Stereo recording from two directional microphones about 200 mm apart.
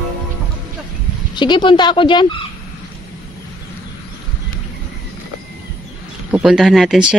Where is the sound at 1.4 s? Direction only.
25° left (ahead or behind).